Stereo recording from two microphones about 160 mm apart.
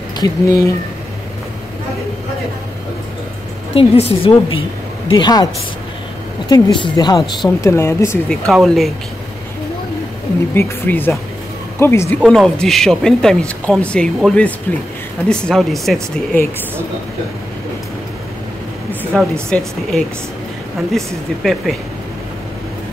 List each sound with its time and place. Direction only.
0.2 s speech: 20° left (ahead or behind)
3.7 s a woman's voice: 35° left (ahead or behind)
6.5 s speech: 30° left (ahead or behind)
8.3 s speech: centre (ahead or behind)
10.5 s speech: 10° left (ahead or behind)
12.2 s speech: centre (ahead or behind)
19.1 s speech: 5° left (ahead or behind)